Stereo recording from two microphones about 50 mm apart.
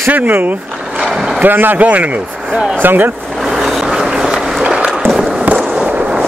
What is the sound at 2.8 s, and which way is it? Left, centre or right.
Speech, right.